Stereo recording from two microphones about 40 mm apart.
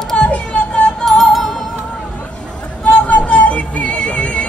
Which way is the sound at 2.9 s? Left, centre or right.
Left.